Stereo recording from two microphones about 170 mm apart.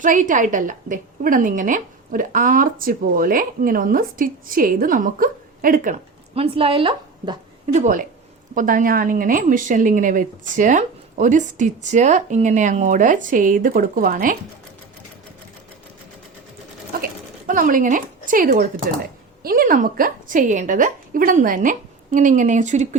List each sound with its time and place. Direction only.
0.0 s a woman's voice: 50° right (ahead or behind)
6.3 s a woman's voice: 35° right (ahead or behind); by 14.3 s 55° right (ahead or behind)
16.9 s sewing machine: 55° right (ahead or behind)
19.4 s a woman's voice: 60° right (ahead or behind)